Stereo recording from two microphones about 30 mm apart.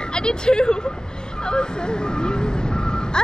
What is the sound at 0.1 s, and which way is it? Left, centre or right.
Speech, left.